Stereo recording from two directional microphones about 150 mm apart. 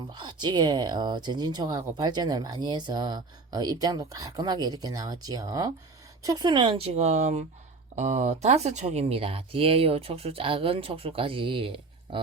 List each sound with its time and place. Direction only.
0.1 s speech: 30° right (ahead or behind)